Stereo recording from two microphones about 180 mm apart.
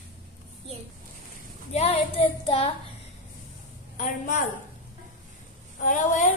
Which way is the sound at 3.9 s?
45° left (ahead or behind).